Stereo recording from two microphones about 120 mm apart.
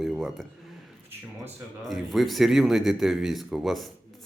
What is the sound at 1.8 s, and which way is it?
Speech, centre (ahead or behind).